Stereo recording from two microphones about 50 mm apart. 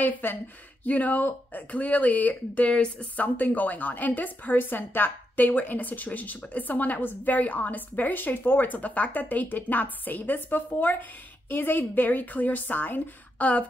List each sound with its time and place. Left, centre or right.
0.0 s a woman's voice: left